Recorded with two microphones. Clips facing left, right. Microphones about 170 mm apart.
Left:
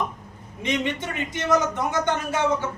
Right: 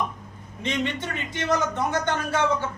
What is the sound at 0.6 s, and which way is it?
Speech, 15° left (ahead or behind).